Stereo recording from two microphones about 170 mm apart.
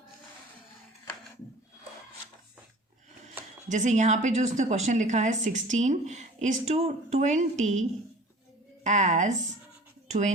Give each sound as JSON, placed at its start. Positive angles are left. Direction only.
{"t": 3.7, "sound": "a woman's voice", "side_deg": -45}